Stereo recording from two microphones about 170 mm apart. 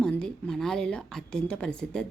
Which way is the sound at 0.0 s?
5° left (ahead or behind).